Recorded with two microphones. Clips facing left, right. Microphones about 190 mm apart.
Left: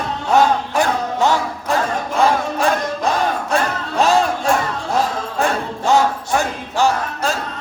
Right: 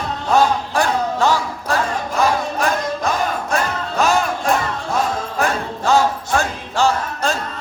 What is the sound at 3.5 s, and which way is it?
Music, 30° left (ahead or behind).